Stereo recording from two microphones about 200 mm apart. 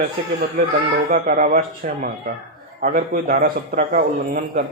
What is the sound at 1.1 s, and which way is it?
A man's voice, 45° right (ahead or behind).